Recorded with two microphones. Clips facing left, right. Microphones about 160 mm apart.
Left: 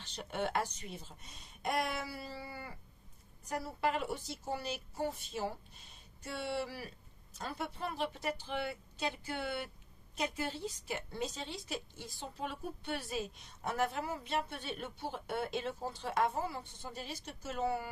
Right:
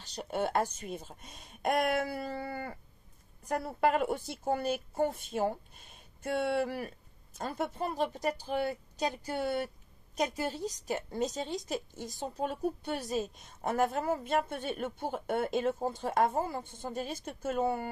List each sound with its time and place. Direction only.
0.0 s a woman's voice: 40° right (ahead or behind)